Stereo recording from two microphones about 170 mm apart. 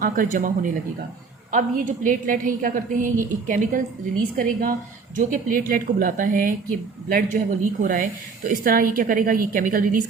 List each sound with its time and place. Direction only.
0.0 s speech: 55° right (ahead or behind)
5.1 s a woman's voice: 55° right (ahead or behind)